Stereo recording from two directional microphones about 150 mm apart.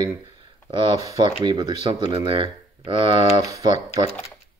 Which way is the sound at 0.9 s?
20° right (ahead or behind).